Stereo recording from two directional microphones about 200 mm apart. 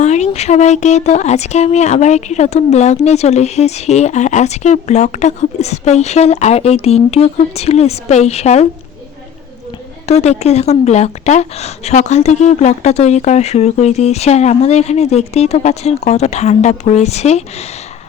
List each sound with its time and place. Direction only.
0.0 s speech: 35° left (ahead or behind)
10.1 s speech: 35° left (ahead or behind)